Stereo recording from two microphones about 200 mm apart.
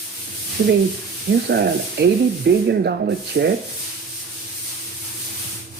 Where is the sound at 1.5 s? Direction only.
55° right (ahead or behind).